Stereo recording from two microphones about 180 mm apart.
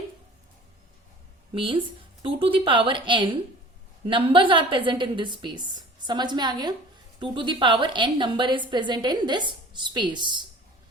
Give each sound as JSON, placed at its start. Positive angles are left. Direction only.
{"t": 1.5, "sound": "a woman's voice", "side_deg": -30}